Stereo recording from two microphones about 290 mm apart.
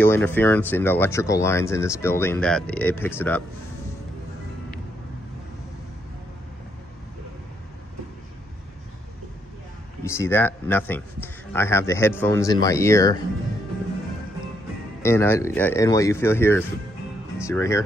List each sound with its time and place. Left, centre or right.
0.0 s speech: centre
10.0 s speech: centre
15.0 s speech: centre